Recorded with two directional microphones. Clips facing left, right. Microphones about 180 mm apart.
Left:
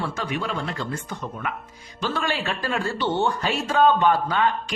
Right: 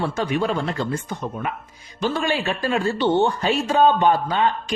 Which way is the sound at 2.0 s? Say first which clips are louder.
Right 4 dB; 15° right (ahead or behind).